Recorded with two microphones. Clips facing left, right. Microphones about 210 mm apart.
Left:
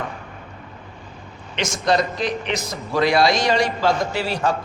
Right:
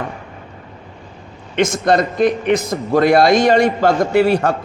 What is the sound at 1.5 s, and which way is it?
A man's voice, 55° right (ahead or behind).